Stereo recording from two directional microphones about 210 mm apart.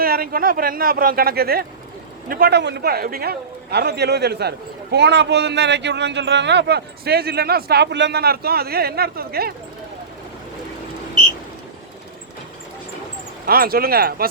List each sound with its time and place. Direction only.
0.0 s a man's voice: 45° right (ahead or behind)
13.4 s a man's voice: 45° right (ahead or behind)